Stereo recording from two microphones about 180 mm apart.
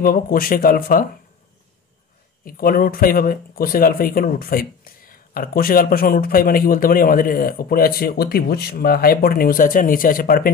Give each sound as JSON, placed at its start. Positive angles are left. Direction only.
{"t": 0.0, "sound": "speech", "side_deg": 50}
{"t": 2.4, "sound": "speech", "side_deg": 50}